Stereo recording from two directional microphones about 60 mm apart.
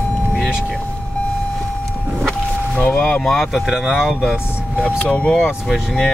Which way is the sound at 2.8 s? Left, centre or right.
Left.